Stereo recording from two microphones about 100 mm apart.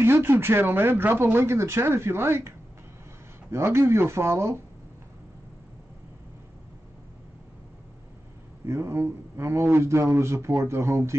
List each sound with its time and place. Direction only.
0.0 s speech: 25° right (ahead or behind)
3.5 s speech: 25° right (ahead or behind)
8.6 s speech: 25° right (ahead or behind)